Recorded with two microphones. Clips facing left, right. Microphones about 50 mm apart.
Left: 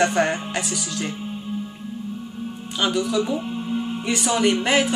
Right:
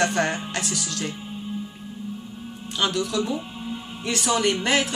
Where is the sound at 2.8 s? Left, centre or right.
Centre.